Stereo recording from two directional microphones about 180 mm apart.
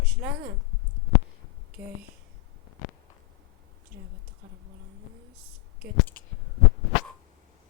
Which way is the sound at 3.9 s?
75° right (ahead or behind).